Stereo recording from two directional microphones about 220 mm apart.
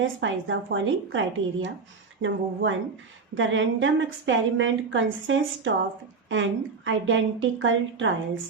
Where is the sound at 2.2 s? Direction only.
60° right (ahead or behind).